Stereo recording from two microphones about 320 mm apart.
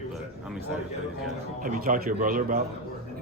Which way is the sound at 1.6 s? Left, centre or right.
Right.